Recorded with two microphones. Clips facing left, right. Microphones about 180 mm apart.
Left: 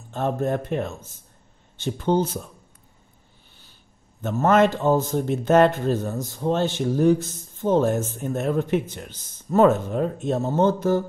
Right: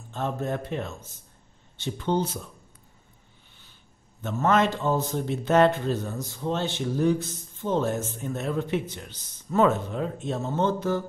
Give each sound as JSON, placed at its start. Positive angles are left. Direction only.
{"t": 0.1, "sound": "a man's voice", "side_deg": 50}
{"t": 4.2, "sound": "a man's voice", "side_deg": 50}